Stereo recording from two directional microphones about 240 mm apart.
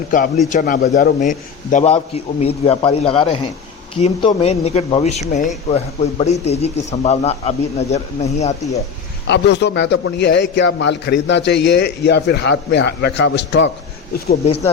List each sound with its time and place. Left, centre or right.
0.5 s speech: left
9.2 s a man's voice: left